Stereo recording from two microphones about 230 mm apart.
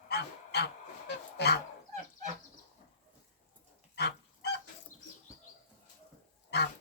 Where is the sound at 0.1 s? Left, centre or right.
Left.